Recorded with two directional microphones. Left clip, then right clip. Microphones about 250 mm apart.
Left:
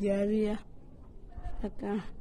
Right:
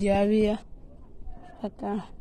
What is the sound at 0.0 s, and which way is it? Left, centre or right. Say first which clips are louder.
Speech: right 6 dB; right.